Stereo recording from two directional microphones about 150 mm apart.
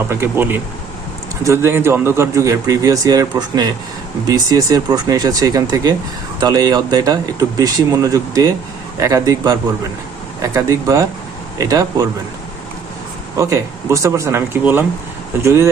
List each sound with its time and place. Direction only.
0.0 s speech: 15° right (ahead or behind)
13.3 s speech: 20° right (ahead or behind)